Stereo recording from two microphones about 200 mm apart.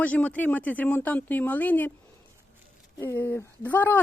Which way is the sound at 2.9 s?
10° left (ahead or behind).